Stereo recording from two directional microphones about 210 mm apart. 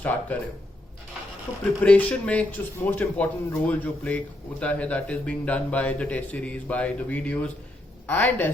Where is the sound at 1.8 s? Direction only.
5° left (ahead or behind).